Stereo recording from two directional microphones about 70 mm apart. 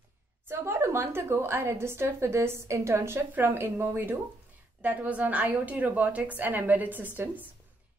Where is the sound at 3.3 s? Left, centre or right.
Right.